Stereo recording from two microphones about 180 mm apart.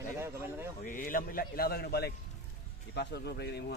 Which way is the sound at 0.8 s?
50° left (ahead or behind).